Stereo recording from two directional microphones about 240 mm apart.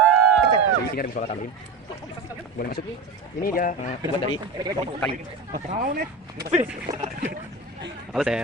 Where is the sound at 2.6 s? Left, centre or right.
Left.